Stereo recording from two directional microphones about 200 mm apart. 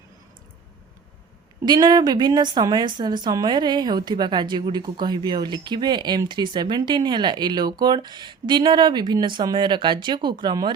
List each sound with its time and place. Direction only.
1.6 s a woman's voice: 20° right (ahead or behind)